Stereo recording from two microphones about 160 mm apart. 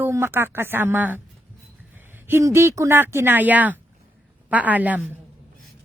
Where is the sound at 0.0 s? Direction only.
15° right (ahead or behind).